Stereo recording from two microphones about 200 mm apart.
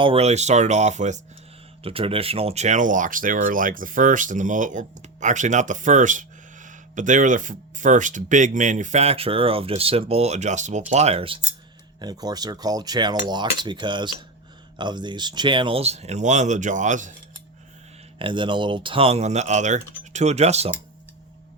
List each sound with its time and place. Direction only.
0.0 s speech: 30° right (ahead or behind)
11.9 s cutlery: 20° right (ahead or behind)
14.8 s speech: 20° right (ahead or behind); by 17.2 s 40° right (ahead or behind)
18.2 s cutlery: 25° right (ahead or behind)
20.1 s speech: 35° right (ahead or behind)